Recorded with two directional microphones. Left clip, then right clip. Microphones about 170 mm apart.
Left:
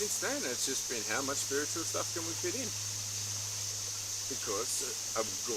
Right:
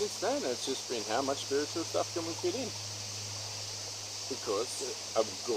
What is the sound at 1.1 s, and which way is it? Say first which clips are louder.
Speech: right 3 dB; 25° left (ahead or behind).